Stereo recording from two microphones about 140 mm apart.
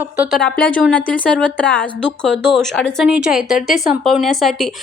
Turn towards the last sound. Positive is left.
turn(degrees=0)  # may be behind; listen again after turning